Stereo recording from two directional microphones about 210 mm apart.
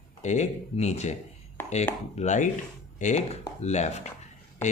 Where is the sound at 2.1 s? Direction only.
35° left (ahead or behind).